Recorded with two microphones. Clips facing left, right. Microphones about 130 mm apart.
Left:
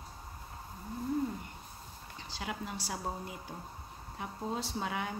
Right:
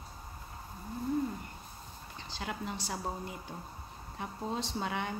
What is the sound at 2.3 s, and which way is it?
Speech, 10° left (ahead or behind).